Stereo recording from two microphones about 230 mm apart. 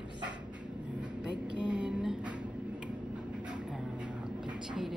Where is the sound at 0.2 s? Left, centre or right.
Centre.